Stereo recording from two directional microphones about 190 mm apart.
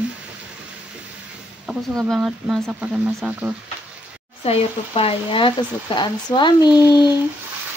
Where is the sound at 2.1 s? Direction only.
Centre (ahead or behind).